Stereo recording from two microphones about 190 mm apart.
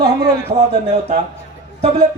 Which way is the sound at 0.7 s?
30° right (ahead or behind).